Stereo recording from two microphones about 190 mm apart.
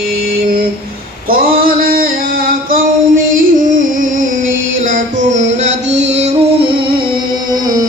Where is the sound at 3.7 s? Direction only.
45° right (ahead or behind).